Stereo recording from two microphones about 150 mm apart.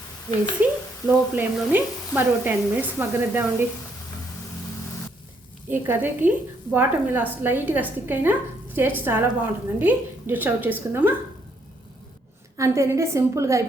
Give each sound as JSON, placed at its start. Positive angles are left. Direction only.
{"t": 0.6, "sound": "a woman's voice", "side_deg": -10}
{"t": 5.6, "sound": "a woman's voice", "side_deg": -15}
{"t": 12.5, "sound": "a woman's voice", "side_deg": -20}